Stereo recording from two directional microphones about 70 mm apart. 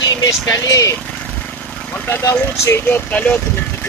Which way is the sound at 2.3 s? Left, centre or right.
Left.